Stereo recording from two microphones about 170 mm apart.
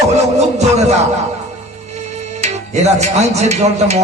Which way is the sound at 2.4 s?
40° right (ahead or behind).